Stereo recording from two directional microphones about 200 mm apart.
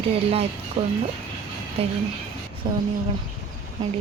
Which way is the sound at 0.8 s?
30° right (ahead or behind).